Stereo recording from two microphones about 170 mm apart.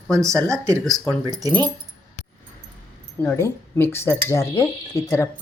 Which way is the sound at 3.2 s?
15° left (ahead or behind).